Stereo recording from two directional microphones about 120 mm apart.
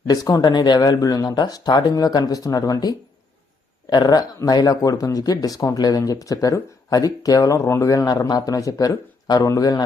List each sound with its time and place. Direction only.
0.1 s speech: 30° left (ahead or behind)